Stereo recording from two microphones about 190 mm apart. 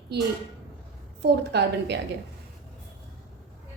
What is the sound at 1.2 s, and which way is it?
Speech, 60° right (ahead or behind).